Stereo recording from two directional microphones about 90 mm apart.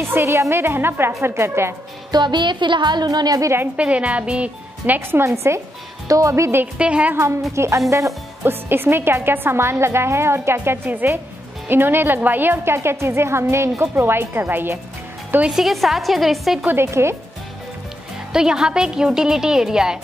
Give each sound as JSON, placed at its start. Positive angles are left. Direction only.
{"t": 0.0, "sound": "speech", "side_deg": -30}
{"t": 2.1, "sound": "a woman's voice", "side_deg": -55}
{"t": 3.7, "sound": "a woman's voice", "side_deg": -15}
{"t": 5.2, "sound": "a woman's voice", "side_deg": -30}
{"t": 6.6, "sound": "a woman's voice", "side_deg": -15}
{"t": 7.5, "sound": "a woman's voice", "side_deg": -30}
{"t": 15.5, "sound": "a woman's voice", "side_deg": 0}
{"t": 16.6, "sound": "speech", "side_deg": -30}
{"t": 18.3, "sound": "a woman's voice", "side_deg": -5}